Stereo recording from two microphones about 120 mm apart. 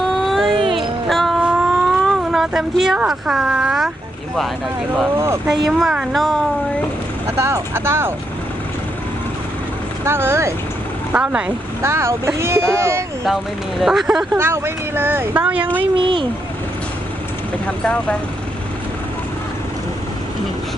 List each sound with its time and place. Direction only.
0.0 s a sound: centre (ahead or behind)
0.5 s music: 45° right (ahead or behind)
0.8 s music: centre (ahead or behind)
1.4 s a sound: 5° right (ahead or behind)
5.1 s speech: 20° right (ahead or behind)
5.6 s speech: 5° right (ahead or behind)
7.3 s speech: 20° right (ahead or behind)
10.0 s speech: 20° right (ahead or behind)
11.1 s speech: 10° right (ahead or behind)
11.8 s speech: 20° right (ahead or behind)
13.2 s speech: centre (ahead or behind)
14.3 s speech: 20° right (ahead or behind)
16.0 s speech: 45° right (ahead or behind)
17.7 s speech: 10° left (ahead or behind)